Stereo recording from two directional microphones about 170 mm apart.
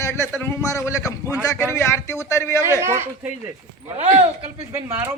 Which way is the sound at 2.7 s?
15° right (ahead or behind).